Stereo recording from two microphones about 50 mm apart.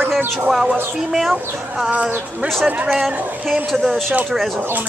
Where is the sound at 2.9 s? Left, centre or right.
Centre.